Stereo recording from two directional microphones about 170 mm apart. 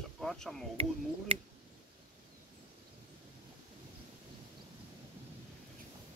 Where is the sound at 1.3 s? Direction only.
35° right (ahead or behind).